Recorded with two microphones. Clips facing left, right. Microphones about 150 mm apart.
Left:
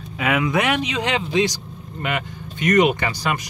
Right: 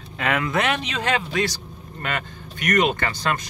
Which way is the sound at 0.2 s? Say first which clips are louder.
Left 2 dB; 10° left (ahead or behind).